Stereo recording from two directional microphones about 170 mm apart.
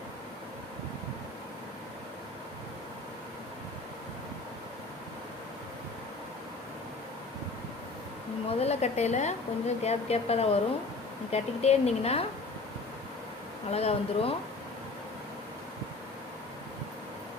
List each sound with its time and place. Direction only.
8.4 s speech: 40° left (ahead or behind)
13.7 s speech: 40° left (ahead or behind)